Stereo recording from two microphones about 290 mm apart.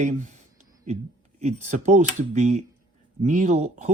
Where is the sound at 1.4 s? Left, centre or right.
Right.